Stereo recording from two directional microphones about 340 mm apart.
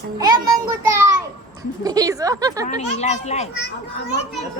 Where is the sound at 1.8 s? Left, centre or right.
Centre.